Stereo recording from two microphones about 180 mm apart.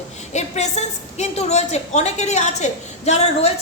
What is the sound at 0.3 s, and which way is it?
A woman's voice, 40° left (ahead or behind).